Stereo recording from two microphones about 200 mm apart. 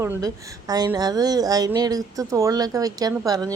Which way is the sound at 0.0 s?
10° right (ahead or behind).